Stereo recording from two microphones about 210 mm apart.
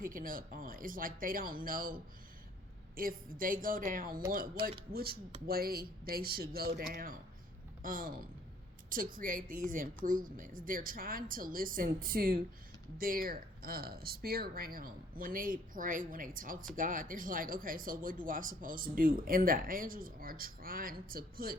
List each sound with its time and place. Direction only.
0.0 s speech: 40° right (ahead or behind)